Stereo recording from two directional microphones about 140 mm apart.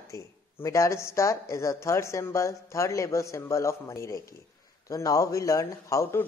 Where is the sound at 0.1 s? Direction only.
20° left (ahead or behind).